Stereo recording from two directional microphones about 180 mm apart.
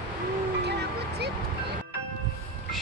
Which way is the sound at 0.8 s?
65° right (ahead or behind).